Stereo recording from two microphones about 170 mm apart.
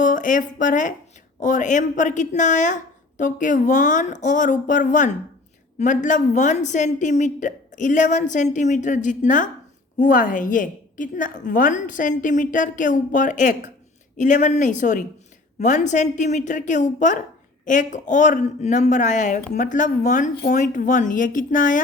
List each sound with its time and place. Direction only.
0.0 s speech: 50° left (ahead or behind)